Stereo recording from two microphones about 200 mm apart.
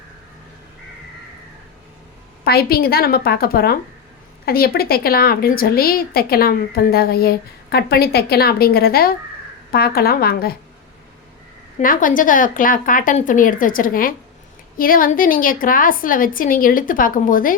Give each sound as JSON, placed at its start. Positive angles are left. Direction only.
{"t": 2.4, "sound": "a woman's voice", "side_deg": 50}
{"t": 11.8, "sound": "a woman's voice", "side_deg": 40}